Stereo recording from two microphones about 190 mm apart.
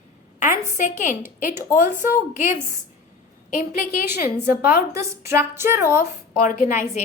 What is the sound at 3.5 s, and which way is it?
Speech, 40° left (ahead or behind).